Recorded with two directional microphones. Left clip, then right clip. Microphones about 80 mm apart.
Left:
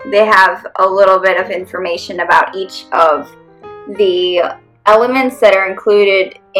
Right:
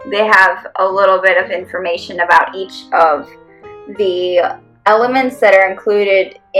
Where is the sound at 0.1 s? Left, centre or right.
Left.